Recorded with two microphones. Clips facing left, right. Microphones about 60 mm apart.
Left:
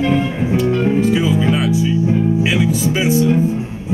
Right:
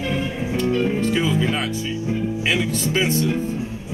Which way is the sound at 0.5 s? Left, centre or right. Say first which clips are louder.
Left 5 dB; centre.